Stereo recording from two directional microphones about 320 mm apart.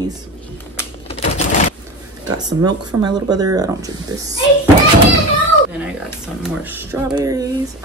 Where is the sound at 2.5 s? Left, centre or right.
Centre.